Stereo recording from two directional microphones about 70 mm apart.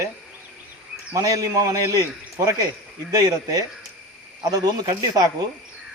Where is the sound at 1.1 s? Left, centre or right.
Right.